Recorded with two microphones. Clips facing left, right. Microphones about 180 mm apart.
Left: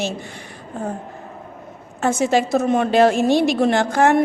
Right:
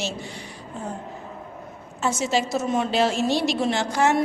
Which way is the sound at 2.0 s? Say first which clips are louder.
Left 6 dB; 55° left (ahead or behind).